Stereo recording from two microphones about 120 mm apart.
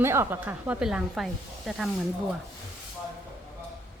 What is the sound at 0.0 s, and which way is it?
Speech, 20° right (ahead or behind).